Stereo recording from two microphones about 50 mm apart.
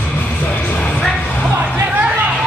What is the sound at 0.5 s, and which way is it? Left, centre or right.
Music, left.